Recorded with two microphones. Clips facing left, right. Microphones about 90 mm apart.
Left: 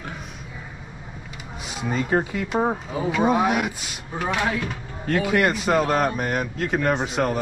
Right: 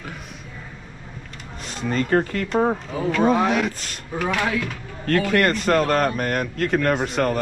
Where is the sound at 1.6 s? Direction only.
5° left (ahead or behind).